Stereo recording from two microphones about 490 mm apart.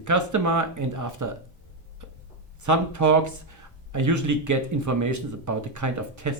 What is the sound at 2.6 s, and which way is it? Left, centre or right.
Speech, right.